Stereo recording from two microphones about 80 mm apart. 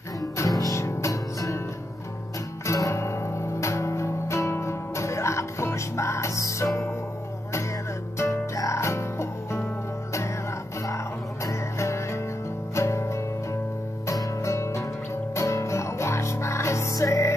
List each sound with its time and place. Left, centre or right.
0.2 s music: left
2.6 s music: left
8.2 s music: left
11.4 s music: left